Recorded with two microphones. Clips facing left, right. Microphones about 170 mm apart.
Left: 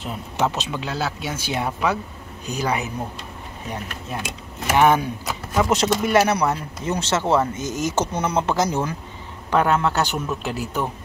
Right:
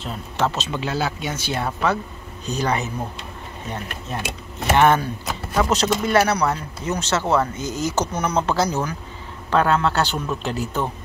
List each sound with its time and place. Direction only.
0.0 s speech: 15° left (ahead or behind)
0.7 s speech: centre (ahead or behind)
4.1 s speech: 5° left (ahead or behind)
5.6 s speech: 20° left (ahead or behind)
9.5 s speech: 15° left (ahead or behind)